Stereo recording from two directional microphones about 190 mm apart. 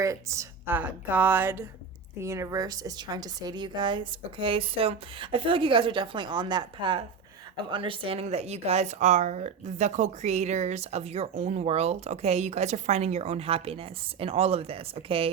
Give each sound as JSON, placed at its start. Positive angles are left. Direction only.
{"t": 0.0, "sound": "a woman's voice", "side_deg": -15}